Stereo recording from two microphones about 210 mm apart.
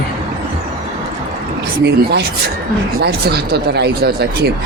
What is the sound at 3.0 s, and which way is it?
A man's voice, 50° right (ahead or behind).